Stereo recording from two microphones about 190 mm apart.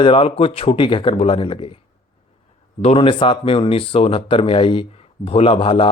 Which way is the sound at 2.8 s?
30° left (ahead or behind).